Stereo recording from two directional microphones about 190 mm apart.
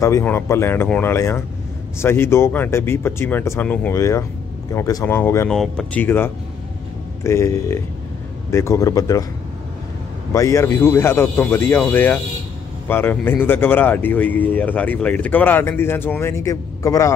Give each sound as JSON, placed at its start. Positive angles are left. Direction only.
{"t": 0.0, "sound": "speech", "side_deg": 15}
{"t": 10.3, "sound": "speech", "side_deg": 15}